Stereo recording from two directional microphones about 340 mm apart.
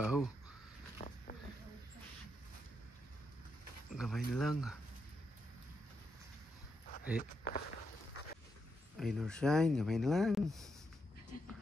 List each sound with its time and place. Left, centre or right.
0.0 s a sound: centre
0.9 s vehicle: left
3.9 s speech: centre
7.2 s speech: left
8.9 s speech: centre